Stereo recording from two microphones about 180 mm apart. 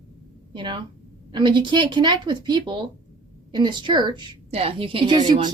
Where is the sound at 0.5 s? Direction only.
25° right (ahead or behind).